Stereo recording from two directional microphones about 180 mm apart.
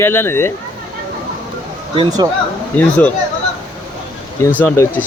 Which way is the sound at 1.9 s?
25° right (ahead or behind).